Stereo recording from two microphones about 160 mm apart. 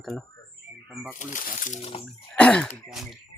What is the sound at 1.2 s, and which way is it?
Speech, 55° left (ahead or behind).